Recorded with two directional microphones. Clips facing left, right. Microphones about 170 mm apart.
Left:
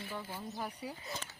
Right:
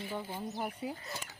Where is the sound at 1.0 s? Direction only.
10° right (ahead or behind).